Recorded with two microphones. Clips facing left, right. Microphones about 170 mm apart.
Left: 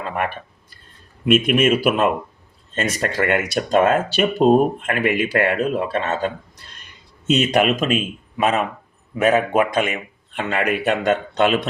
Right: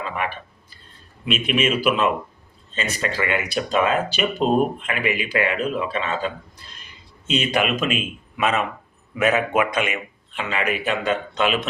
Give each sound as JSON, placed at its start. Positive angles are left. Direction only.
{"t": 1.2, "sound": "speech", "side_deg": 50}
{"t": 7.5, "sound": "a man's voice", "side_deg": 40}
{"t": 10.6, "sound": "speech", "side_deg": 60}